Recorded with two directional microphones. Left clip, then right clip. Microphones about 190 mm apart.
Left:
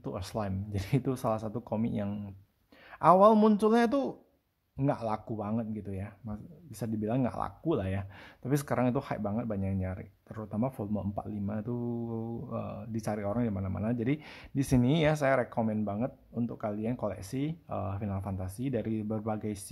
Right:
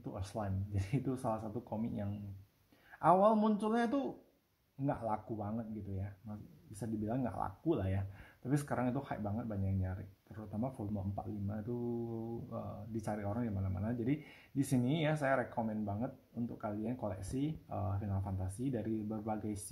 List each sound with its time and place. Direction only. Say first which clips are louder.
0.0 s speech: left 7 dB; 30° left (ahead or behind)
12.1 s speech: left 6 dB; 30° left (ahead or behind)